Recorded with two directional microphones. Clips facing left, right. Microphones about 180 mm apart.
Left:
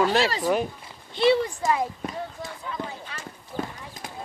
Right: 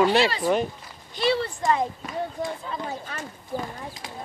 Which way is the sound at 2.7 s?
35° right (ahead or behind).